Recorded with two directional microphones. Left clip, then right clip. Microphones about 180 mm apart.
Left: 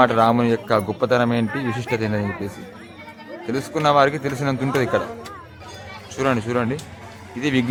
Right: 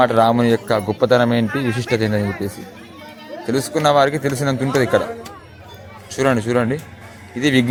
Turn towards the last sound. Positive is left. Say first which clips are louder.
# right 5 dB
turn(degrees=-15)  # may be behind; listen again after turning